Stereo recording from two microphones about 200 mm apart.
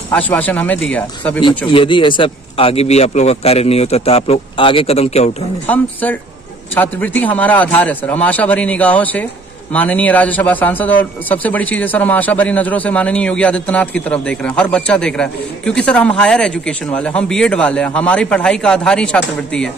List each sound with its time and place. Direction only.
0.1 s a man's voice: 10° left (ahead or behind)
1.7 s speech: 25° left (ahead or behind)
5.7 s a man's voice: 10° left (ahead or behind)